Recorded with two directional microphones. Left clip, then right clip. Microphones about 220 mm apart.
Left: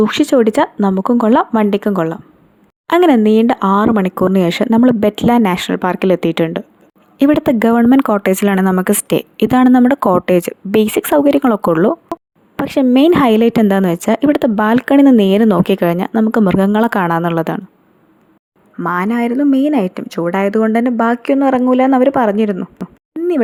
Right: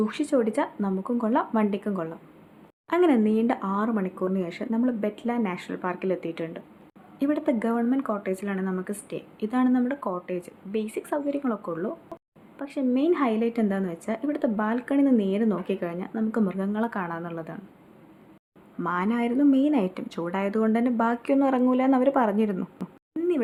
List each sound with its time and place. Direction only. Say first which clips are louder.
0.0 s a woman's voice: left 13 dB; 40° left (ahead or behind)
18.8 s speech: left 10 dB; 30° left (ahead or behind)